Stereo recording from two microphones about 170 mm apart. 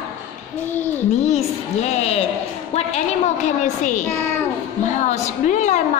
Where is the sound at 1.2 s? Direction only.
40° left (ahead or behind).